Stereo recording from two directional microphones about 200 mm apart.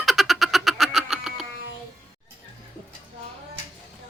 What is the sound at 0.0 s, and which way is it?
Frog, centre (ahead or behind).